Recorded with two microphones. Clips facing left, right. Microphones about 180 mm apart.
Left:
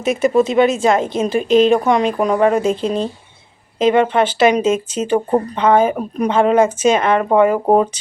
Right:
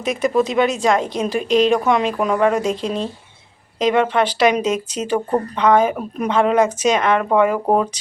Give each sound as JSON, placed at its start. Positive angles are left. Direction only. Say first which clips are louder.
{"t": 0.0, "sound": "a woman's voice", "louder": "left 4 dB", "side_deg": 5}
{"t": 7.5, "sound": "speech", "louder": "left 4 dB", "side_deg": 30}